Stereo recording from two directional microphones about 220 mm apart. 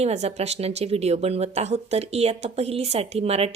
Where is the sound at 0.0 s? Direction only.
30° right (ahead or behind).